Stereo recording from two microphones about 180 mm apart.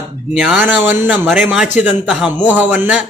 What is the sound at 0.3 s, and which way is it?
A man's voice, centre (ahead or behind).